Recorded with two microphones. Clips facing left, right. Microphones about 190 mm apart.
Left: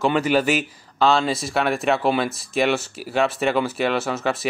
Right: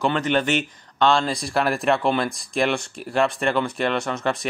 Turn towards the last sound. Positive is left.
turn(degrees=5)  # may be behind; listen again after turning